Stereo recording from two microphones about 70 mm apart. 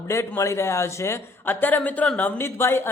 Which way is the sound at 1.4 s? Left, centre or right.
Left.